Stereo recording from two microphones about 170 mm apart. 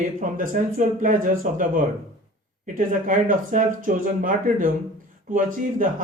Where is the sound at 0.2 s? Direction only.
50° right (ahead or behind).